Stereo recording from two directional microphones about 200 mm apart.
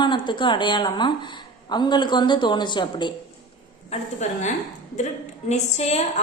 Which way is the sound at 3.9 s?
35° left (ahead or behind).